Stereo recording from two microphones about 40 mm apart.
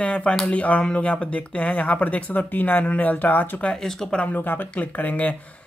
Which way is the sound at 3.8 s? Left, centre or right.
Centre.